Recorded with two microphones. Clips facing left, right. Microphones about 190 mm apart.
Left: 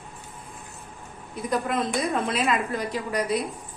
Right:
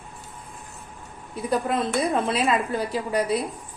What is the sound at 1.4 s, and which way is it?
Speech, 30° right (ahead or behind).